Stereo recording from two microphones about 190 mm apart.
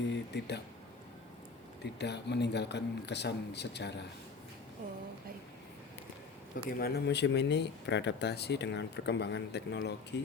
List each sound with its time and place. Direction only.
0.1 s speech: 65° left (ahead or behind)
1.8 s speech: 65° left (ahead or behind)
6.7 s speech: 55° left (ahead or behind)